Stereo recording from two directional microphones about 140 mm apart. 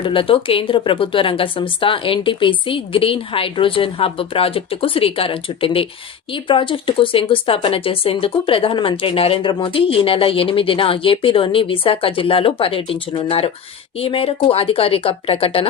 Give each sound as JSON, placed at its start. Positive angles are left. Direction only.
{"t": 0.0, "sound": "speech", "side_deg": 40}